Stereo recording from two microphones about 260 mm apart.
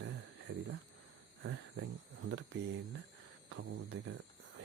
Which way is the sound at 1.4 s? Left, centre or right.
Right.